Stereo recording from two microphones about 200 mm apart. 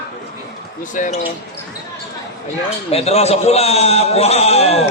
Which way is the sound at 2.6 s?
30° left (ahead or behind).